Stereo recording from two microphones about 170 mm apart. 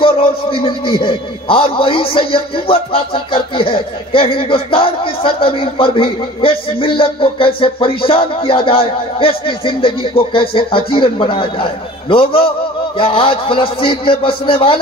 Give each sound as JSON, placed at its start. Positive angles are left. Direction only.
{"t": 0.0, "sound": "a man's voice", "side_deg": 30}